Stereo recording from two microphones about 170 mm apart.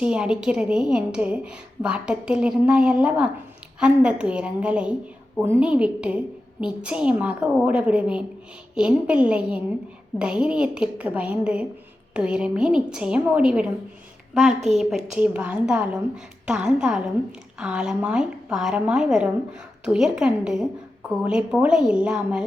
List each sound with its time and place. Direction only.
0.0 s a woman's voice: 5° right (ahead or behind)